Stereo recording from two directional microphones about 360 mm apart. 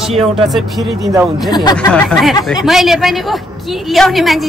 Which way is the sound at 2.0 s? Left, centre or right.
Centre.